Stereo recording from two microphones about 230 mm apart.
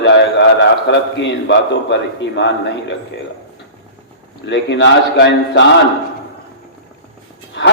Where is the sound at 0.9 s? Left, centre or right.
Left.